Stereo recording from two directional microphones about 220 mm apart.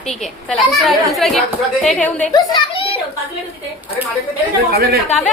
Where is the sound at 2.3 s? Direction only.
20° left (ahead or behind).